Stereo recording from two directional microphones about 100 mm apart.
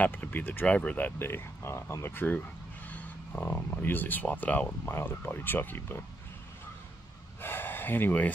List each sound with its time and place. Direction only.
0.0 s speech: 15° left (ahead or behind)
3.4 s speech: 20° left (ahead or behind)
7.4 s a sound: 20° left (ahead or behind)